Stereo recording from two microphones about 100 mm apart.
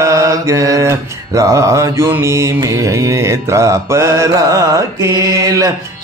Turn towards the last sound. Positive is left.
turn(degrees=-35)  # may be behind; listen again after turning